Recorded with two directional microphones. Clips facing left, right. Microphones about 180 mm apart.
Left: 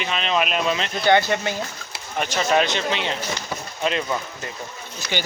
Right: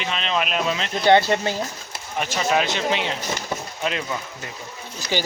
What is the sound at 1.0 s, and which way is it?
Speech, 30° right (ahead or behind).